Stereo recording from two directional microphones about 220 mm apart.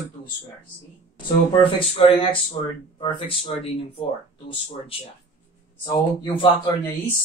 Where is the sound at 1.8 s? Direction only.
25° left (ahead or behind).